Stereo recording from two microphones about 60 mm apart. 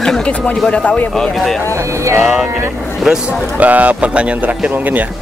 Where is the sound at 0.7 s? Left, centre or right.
Left.